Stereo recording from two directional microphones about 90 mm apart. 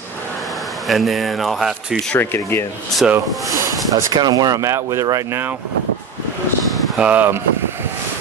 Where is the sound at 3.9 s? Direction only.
45° right (ahead or behind); by 5.5 s 25° right (ahead or behind).